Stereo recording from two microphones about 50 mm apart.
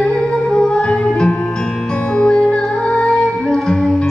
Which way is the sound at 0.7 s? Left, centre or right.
Centre.